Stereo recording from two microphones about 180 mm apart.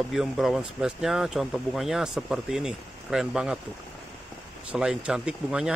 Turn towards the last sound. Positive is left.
turn(degrees=-5)  # may be behind; listen again after turning